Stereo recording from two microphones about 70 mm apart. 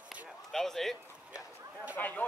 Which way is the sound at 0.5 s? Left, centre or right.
Centre.